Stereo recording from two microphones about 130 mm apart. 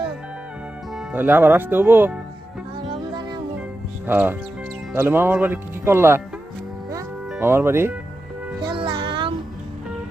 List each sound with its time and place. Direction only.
1.1 s speech: 15° right (ahead or behind)
2.7 s music: 30° right (ahead or behind)
4.0 s speech: 15° right (ahead or behind)
7.3 s speech: 15° right (ahead or behind)
8.6 s music: 40° right (ahead or behind)